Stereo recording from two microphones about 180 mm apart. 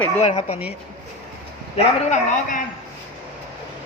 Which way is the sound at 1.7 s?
40° left (ahead or behind).